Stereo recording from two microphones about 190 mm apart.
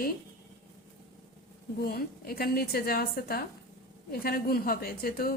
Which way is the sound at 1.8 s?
50° left (ahead or behind).